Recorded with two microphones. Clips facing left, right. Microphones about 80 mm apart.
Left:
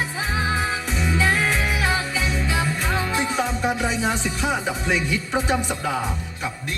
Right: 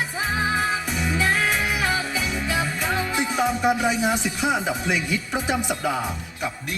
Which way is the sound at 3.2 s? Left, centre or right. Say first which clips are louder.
Right 1 dB; centre.